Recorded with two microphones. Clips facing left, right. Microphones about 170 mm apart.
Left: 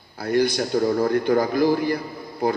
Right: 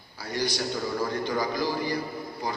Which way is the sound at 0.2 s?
55° left (ahead or behind).